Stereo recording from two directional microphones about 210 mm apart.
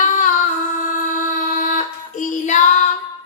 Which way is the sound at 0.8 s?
40° left (ahead or behind).